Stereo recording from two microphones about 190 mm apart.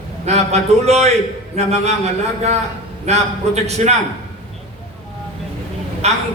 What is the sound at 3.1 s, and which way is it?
Speech, 35° right (ahead or behind).